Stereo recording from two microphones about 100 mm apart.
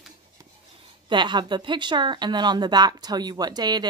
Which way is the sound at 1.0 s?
50° right (ahead or behind).